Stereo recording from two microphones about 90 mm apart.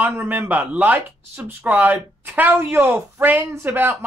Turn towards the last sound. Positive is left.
turn(degrees=-20)  # may be behind; listen again after turning